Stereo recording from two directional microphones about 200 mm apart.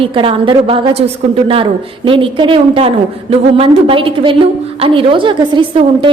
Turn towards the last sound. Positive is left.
turn(degrees=-25)  # may be behind; listen again after turning